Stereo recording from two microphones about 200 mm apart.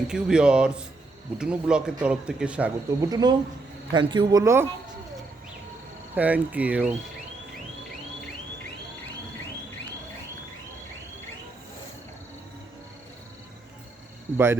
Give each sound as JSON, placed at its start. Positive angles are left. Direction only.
{"t": 0.1, "sound": "speech", "side_deg": -5}
{"t": 3.1, "sound": "speech", "side_deg": -20}
{"t": 6.1, "sound": "speech", "side_deg": -10}
{"t": 14.3, "sound": "speech", "side_deg": -10}